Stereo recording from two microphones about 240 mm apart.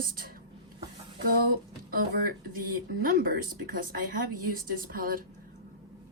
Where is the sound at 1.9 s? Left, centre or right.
Right.